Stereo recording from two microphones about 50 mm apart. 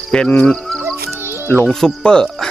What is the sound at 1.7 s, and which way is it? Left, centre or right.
Speech, centre.